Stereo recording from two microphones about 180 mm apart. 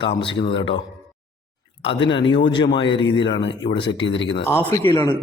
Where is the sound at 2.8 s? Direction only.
80° left.